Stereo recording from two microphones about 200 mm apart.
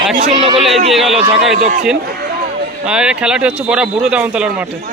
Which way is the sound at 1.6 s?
40° right (ahead or behind).